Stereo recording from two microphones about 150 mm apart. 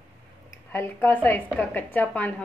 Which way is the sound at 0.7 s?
15° left (ahead or behind).